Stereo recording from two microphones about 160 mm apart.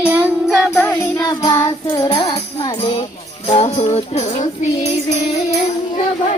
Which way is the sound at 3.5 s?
40° left (ahead or behind).